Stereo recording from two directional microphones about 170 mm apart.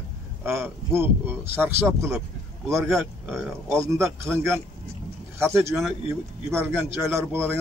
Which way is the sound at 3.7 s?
15° right (ahead or behind).